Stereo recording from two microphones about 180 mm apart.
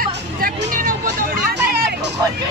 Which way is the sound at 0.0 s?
50° right (ahead or behind).